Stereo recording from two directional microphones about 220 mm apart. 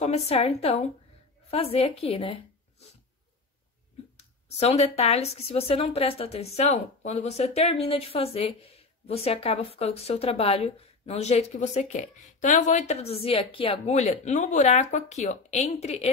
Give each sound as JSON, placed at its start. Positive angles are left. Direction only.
{"t": 0.0, "sound": "a woman's voice", "side_deg": 30}
{"t": 4.6, "sound": "a woman's voice", "side_deg": 30}